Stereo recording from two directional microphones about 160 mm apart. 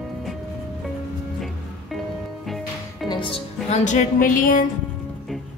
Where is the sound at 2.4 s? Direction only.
Centre (ahead or behind).